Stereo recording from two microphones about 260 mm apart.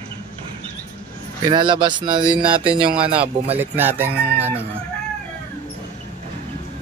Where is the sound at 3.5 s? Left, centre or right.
Centre.